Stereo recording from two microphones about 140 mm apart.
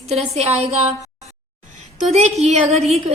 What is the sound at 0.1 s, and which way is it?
Speech, 50° right (ahead or behind).